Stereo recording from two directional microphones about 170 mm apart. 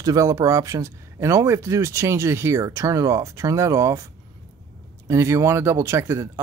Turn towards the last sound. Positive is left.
turn(degrees=-15)  # may be behind; listen again after turning